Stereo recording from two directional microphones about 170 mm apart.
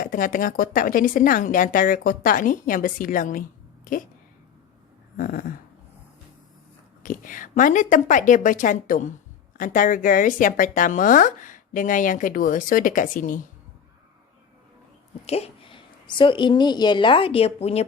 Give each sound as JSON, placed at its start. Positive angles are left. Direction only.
{"t": 0.0, "sound": "speech", "side_deg": 55}
{"t": 5.1, "sound": "speech", "side_deg": 55}
{"t": 7.0, "sound": "speech", "side_deg": 50}
{"t": 15.3, "sound": "a woman's voice", "side_deg": 35}